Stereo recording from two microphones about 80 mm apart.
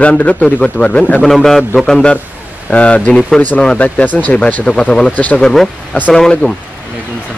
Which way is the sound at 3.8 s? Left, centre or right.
Left.